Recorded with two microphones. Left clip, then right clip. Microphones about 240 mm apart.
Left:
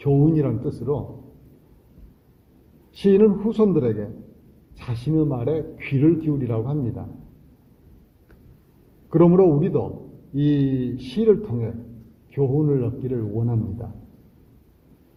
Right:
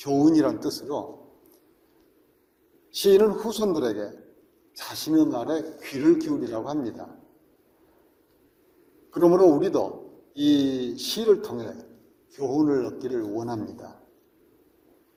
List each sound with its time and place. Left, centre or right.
0.0 s a man's voice: right
3.0 s a man's voice: right
9.3 s a man's voice: right